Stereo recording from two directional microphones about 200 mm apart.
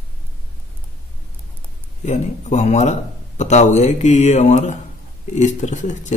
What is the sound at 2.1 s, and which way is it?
Speech, 35° left (ahead or behind).